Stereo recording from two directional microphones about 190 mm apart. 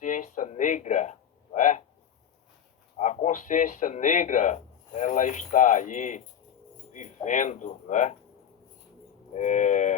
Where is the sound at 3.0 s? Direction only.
40° left (ahead or behind).